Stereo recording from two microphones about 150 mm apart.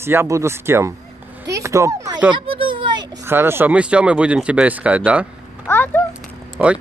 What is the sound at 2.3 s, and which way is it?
Children playing, 35° right (ahead or behind).